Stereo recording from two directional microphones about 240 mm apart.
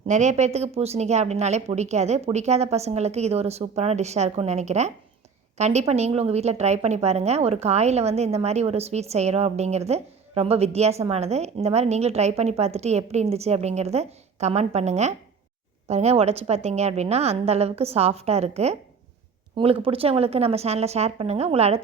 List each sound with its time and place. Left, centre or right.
0.1 s a woman's voice: right